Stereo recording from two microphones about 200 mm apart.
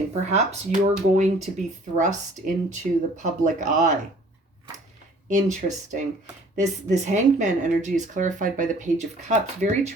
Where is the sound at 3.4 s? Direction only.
40° right (ahead or behind).